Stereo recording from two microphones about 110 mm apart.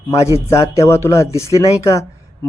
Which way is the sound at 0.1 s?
25° left (ahead or behind).